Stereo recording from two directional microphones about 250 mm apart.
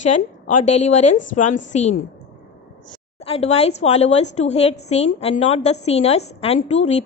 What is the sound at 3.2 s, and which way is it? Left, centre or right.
A woman's voice, left.